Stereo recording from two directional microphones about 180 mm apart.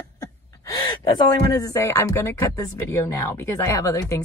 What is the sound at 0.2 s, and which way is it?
Speech, 20° left (ahead or behind).